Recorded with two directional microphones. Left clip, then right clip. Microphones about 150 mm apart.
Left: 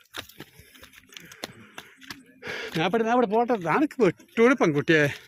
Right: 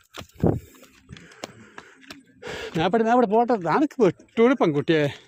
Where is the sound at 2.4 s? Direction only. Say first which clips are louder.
Even; 30° right (ahead or behind).